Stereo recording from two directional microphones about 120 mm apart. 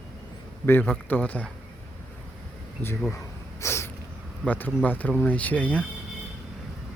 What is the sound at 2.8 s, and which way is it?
Speech, 20° left (ahead or behind).